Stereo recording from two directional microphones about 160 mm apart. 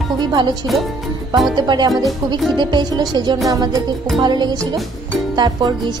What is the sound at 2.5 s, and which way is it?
Speech, 25° right (ahead or behind).